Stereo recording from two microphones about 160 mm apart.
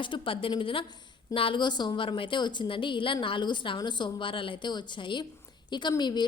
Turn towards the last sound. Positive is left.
turn(degrees=25)  # may be behind; listen again after turning